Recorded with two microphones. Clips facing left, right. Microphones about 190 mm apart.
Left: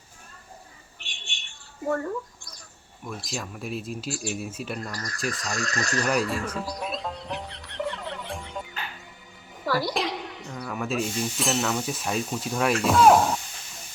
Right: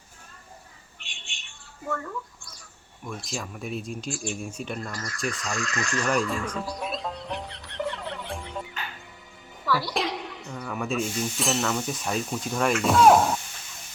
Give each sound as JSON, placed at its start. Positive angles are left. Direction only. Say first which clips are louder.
{"t": 1.9, "sound": "mouse", "louder": "left 5 dB", "side_deg": 35}
{"t": 3.0, "sound": "speech", "louder": "even", "side_deg": 0}
{"t": 4.1, "sound": "speech", "louder": "left 1 dB", "side_deg": 40}
{"t": 4.4, "sound": "speech", "louder": "left 1 dB", "side_deg": 5}
{"t": 4.9, "sound": "speech", "louder": "even", "side_deg": 35}
{"t": 6.4, "sound": "speech", "louder": "even", "side_deg": 5}
{"t": 6.7, "sound": "music", "louder": "even", "side_deg": 0}
{"t": 9.6, "sound": "a woman's voice", "louder": "left 2 dB", "side_deg": 45}
{"t": 9.9, "sound": "a sound", "louder": "even", "side_deg": 0}
{"t": 10.6, "sound": "speech", "louder": "even", "side_deg": 0}